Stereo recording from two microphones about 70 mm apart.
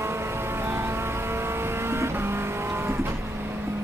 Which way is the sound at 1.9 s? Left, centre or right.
Right.